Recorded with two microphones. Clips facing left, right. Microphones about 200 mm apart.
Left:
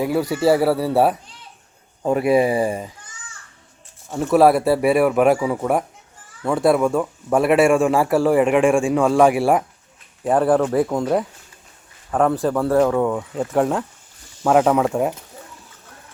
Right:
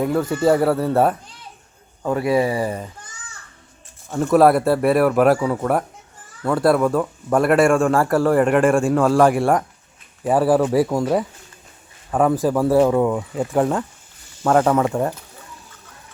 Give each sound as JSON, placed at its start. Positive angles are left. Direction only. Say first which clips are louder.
{"t": 0.0, "sound": "a man's voice", "louder": "even", "side_deg": 10}
{"t": 2.0, "sound": "speech", "louder": "left 2 dB", "side_deg": 20}
{"t": 2.6, "sound": "speech", "louder": "left 2 dB", "side_deg": 10}
{"t": 4.1, "sound": "a man's voice", "louder": "even", "side_deg": 5}